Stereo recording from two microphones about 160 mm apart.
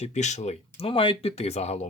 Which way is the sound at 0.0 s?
45° left (ahead or behind).